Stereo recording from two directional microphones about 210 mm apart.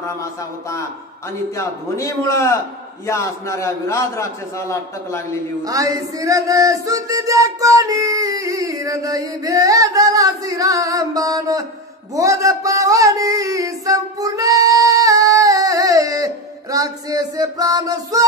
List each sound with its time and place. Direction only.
0.0 s a man's voice: 15° left (ahead or behind)
5.6 s a sound: 15° right (ahead or behind)
16.7 s speech: 15° right (ahead or behind)